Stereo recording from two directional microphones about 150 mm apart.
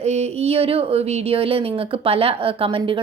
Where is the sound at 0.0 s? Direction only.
45° right (ahead or behind).